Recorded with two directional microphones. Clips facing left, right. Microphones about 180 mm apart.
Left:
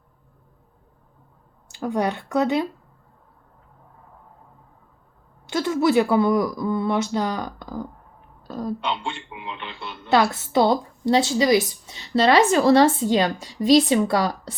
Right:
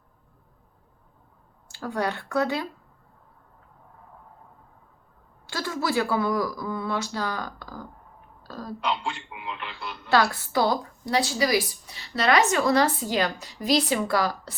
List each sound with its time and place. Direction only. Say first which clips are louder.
1.6 s speech: left 5 dB; 20° left (ahead or behind)
5.5 s a woman's voice: left 8 dB; 20° left (ahead or behind)
9.3 s speech: left 1 dB; centre (ahead or behind)
10.0 s a woman's voice: left 3 dB; 25° left (ahead or behind)